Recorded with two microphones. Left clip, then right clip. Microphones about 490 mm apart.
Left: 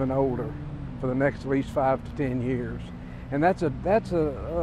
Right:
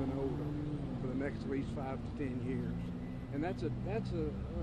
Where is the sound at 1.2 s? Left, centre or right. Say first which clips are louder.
Left 16 dB; left.